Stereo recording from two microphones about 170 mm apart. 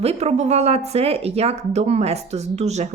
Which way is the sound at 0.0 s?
40° right (ahead or behind).